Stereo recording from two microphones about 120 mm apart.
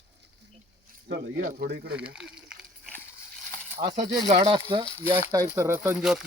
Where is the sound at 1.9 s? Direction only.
10° right (ahead or behind).